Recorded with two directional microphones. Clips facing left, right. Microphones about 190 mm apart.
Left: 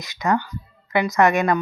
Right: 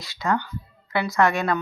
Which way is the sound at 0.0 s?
20° left (ahead or behind).